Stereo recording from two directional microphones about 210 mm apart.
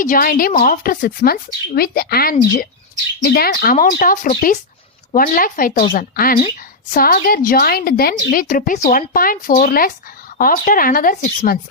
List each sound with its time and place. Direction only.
0.0 s a woman's voice: 40° left (ahead or behind)